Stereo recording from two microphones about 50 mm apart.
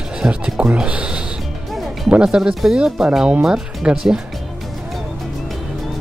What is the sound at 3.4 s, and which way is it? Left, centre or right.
Speech, centre.